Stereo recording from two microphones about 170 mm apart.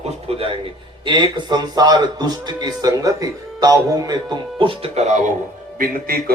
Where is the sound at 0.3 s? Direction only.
35° right (ahead or behind).